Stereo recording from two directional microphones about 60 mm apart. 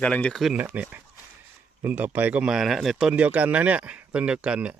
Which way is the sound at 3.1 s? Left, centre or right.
Right.